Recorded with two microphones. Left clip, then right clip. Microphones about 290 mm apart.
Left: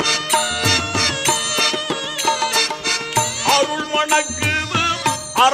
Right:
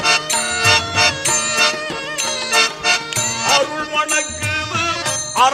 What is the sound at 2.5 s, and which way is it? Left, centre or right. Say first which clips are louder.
Music: right 4 dB; left.